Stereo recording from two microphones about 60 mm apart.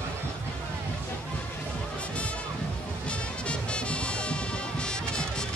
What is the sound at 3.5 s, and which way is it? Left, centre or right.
Music, centre.